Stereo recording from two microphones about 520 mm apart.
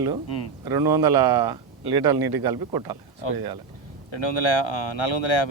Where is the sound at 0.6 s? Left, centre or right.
Right.